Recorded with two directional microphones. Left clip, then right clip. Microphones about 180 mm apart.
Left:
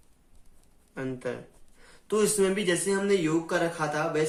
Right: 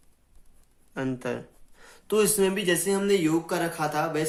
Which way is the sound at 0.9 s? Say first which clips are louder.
Right 3 dB; 40° right (ahead or behind).